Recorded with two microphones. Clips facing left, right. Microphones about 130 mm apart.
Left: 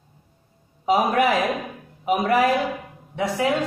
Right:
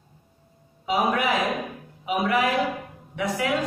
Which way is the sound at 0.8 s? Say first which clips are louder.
Left 4 dB; 45° left (ahead or behind).